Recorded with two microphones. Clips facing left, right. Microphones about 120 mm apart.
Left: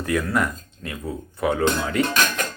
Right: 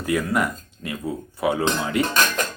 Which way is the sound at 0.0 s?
10° right (ahead or behind).